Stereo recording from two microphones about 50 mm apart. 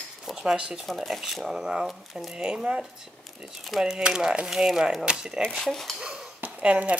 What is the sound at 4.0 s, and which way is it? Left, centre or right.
Speech, centre.